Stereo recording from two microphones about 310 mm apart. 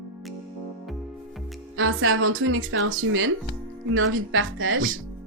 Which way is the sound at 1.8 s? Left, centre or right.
Right.